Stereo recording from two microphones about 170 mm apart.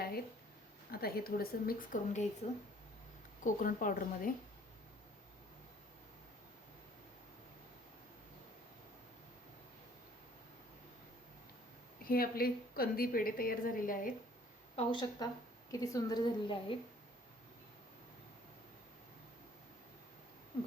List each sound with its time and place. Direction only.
0.9 s a woman's voice: 65° left (ahead or behind)
2.4 s speech: 40° left (ahead or behind)
3.4 s a woman's voice: 50° left (ahead or behind)
12.0 s a woman's voice: 60° left (ahead or behind)
14.8 s a woman's voice: 25° left (ahead or behind)